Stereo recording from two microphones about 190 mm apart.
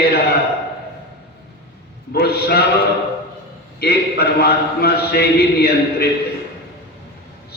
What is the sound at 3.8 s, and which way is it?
A man's voice, 55° left (ahead or behind).